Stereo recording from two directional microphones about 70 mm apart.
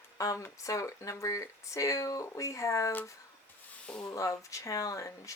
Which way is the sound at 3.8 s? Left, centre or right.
Centre.